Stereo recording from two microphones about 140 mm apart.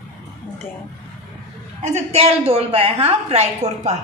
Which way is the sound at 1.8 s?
50° right (ahead or behind).